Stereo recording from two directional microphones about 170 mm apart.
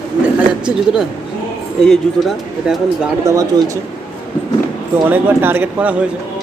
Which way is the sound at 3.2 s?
20° right (ahead or behind).